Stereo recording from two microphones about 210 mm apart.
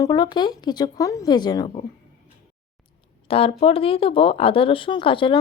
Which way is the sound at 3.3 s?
25° left (ahead or behind).